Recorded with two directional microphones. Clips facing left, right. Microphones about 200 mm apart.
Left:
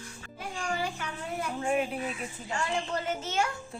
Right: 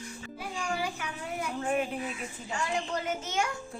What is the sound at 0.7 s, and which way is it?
Speech, 10° right (ahead or behind).